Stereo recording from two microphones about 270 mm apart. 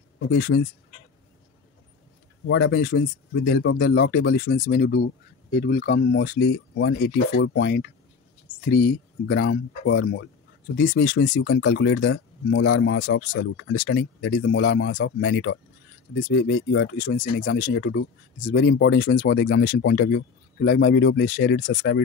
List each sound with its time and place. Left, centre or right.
0.3 s speech: left
2.4 s speech: left